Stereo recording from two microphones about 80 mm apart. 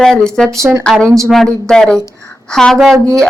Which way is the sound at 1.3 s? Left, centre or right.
Centre.